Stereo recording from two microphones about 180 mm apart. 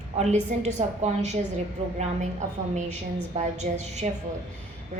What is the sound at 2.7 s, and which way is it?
A woman's voice, 40° right (ahead or behind).